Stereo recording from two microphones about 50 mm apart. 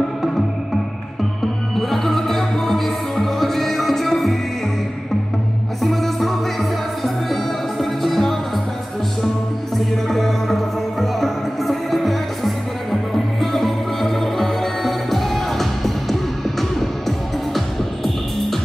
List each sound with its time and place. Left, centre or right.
1.8 s music: centre
5.8 s music: centre
7.8 s music: centre
9.8 s music: centre